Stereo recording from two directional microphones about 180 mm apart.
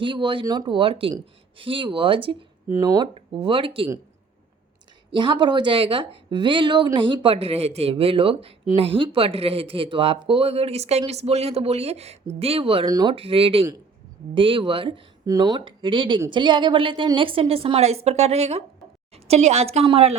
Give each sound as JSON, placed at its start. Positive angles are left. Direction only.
{"t": 0.0, "sound": "speech", "side_deg": -25}
{"t": 2.6, "sound": "speech", "side_deg": -20}
{"t": 5.1, "sound": "speech", "side_deg": -25}